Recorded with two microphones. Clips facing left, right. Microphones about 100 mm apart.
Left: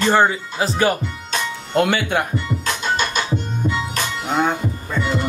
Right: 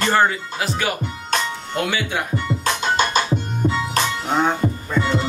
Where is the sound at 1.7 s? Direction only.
55° left (ahead or behind).